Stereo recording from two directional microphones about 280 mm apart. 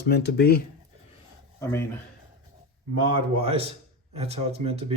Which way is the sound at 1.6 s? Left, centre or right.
Centre.